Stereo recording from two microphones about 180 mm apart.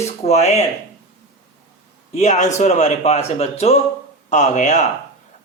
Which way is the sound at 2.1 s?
40° left (ahead or behind).